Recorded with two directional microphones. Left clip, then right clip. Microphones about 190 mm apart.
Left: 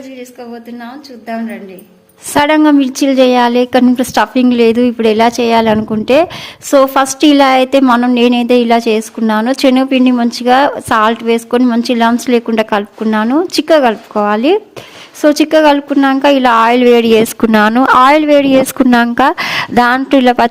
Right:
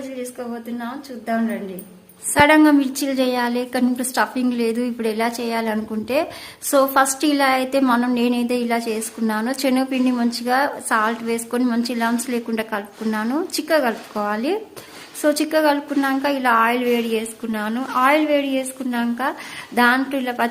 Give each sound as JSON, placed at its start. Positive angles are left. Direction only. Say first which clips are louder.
{"t": 2.3, "sound": "a woman's voice", "louder": "left 5 dB", "side_deg": 45}